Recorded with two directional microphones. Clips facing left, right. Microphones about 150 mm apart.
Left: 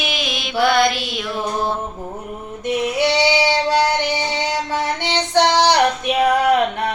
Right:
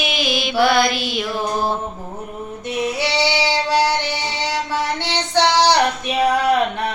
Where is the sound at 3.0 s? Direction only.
50° left (ahead or behind).